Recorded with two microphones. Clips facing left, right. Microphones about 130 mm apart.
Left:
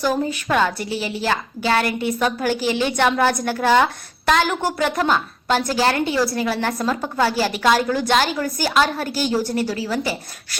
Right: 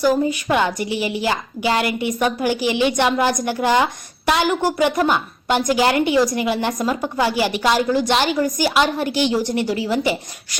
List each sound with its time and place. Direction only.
0.0 s a woman's voice: 10° right (ahead or behind)
9.0 s a woman's voice: 45° left (ahead or behind)
9.6 s a woman's voice: 20° right (ahead or behind)